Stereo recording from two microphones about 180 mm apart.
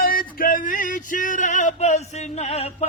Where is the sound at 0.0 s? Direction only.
50° left (ahead or behind).